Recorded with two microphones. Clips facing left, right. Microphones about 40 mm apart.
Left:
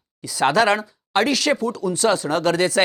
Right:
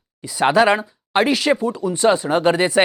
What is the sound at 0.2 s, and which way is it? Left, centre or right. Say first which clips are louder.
Speech: right 2 dB; centre.